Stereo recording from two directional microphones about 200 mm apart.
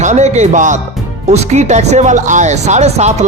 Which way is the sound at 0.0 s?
35° right (ahead or behind).